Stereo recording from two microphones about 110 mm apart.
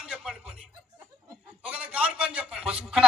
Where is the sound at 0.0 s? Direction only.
10° right (ahead or behind).